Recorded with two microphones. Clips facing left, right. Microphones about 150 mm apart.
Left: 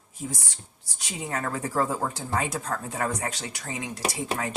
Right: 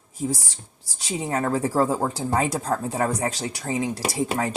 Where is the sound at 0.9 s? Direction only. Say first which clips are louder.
Right 6 dB; 30° right (ahead or behind).